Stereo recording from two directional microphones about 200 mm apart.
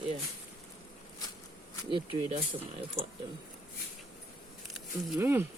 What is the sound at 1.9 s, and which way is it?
Speech, 25° right (ahead or behind).